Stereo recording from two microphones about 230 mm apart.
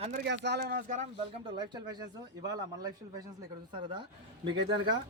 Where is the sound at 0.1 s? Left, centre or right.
Right.